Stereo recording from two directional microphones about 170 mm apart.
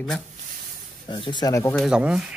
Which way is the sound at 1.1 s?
25° left (ahead or behind).